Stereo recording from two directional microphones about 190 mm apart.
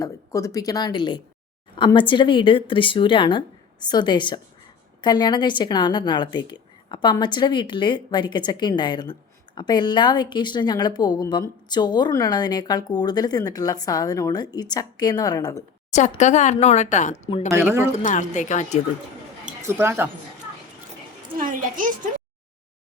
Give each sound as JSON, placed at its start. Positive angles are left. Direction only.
{"t": 0.0, "sound": "a woman's voice", "side_deg": 15}
{"t": 15.9, "sound": "speech", "side_deg": 40}
{"t": 17.2, "sound": "a woman's voice", "side_deg": 30}
{"t": 17.5, "sound": "speech", "side_deg": -10}
{"t": 17.9, "sound": "speech", "side_deg": 40}
{"t": 19.6, "sound": "speech", "side_deg": -10}
{"t": 21.3, "sound": "a woman's voice", "side_deg": -45}